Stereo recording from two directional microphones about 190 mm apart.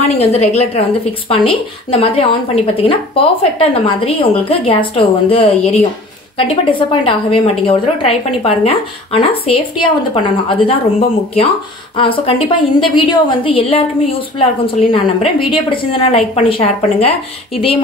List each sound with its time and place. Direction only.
0.0 s a woman's voice: 35° left (ahead or behind)
15.5 s a woman's voice: 25° left (ahead or behind)